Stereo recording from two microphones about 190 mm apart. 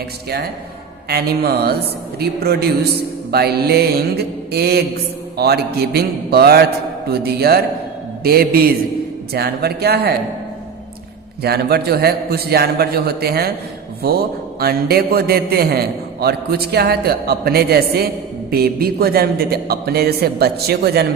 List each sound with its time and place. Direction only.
1.0 s a man's voice: 55° right (ahead or behind)
11.4 s a man's voice: 55° right (ahead or behind)